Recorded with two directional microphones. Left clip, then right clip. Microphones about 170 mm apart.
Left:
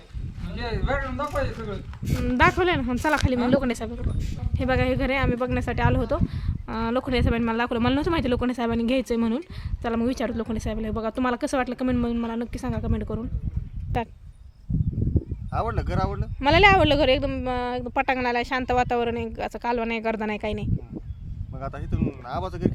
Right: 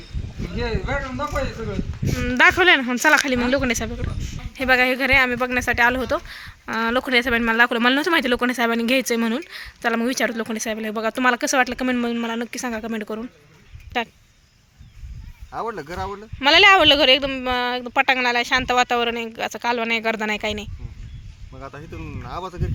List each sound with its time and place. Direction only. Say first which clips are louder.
0.6 s a woman's voice: right 2 dB; 15° left (ahead or behind)
2.2 s speech: right 6 dB; centre (ahead or behind)
15.5 s speech: even; 35° left (ahead or behind)
16.4 s a woman's voice: right 4 dB; 5° left (ahead or behind)
22.3 s speech: left 1 dB; 30° left (ahead or behind)